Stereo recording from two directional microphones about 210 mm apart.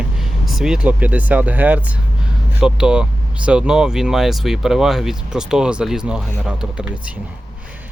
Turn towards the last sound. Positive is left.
turn(degrees=-5)  # may be behind; listen again after turning